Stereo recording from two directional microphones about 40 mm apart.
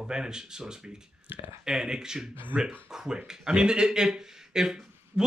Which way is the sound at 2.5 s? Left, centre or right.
Right.